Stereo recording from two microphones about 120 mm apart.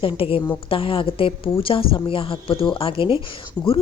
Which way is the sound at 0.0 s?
45° left (ahead or behind).